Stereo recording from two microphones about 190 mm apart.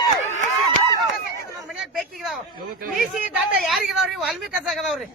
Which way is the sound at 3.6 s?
Centre (ahead or behind).